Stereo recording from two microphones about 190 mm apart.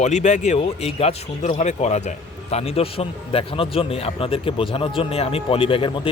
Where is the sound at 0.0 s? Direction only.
40° left (ahead or behind).